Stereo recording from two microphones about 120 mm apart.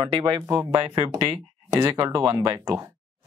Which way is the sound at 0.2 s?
30° right (ahead or behind).